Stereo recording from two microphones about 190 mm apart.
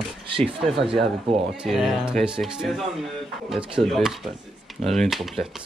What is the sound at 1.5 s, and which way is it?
Speech, centre (ahead or behind).